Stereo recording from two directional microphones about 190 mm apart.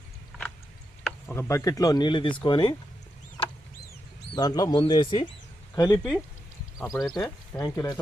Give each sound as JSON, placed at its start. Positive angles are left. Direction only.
{"t": 1.0, "sound": "speech", "side_deg": 10}
{"t": 4.4, "sound": "speech", "side_deg": 20}
{"t": 6.0, "sound": "speech", "side_deg": 0}
{"t": 7.5, "sound": "speech", "side_deg": 15}